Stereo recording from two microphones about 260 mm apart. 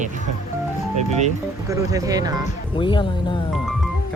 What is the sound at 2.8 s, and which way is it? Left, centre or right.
Speech, centre.